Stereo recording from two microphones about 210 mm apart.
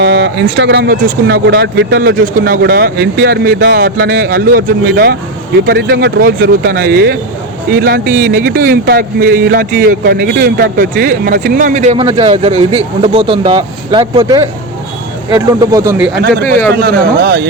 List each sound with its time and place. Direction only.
0.0 s speech: 60° right (ahead or behind); by 16.0 s 15° right (ahead or behind)
16.0 s speech: 5° right (ahead or behind)
16.7 s speech: 45° right (ahead or behind)